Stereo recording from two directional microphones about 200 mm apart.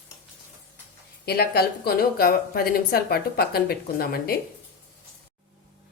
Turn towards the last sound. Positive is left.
turn(degrees=50)  # may be behind; listen again after turning